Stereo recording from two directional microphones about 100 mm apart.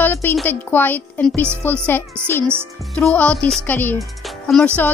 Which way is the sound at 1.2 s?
5° left (ahead or behind).